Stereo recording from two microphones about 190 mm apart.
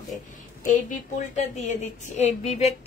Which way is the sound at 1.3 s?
35° left (ahead or behind).